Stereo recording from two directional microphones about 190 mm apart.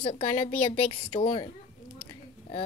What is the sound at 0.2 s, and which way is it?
Speech, 35° left (ahead or behind).